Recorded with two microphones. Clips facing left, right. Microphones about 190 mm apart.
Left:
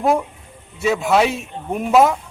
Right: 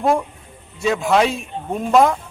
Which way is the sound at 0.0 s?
5° left (ahead or behind).